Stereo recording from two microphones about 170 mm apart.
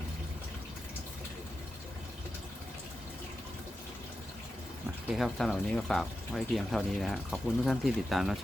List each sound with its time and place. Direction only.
5.1 s speech: centre (ahead or behind)